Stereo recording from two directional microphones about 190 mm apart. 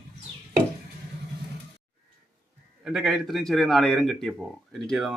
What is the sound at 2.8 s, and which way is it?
Speech, centre (ahead or behind).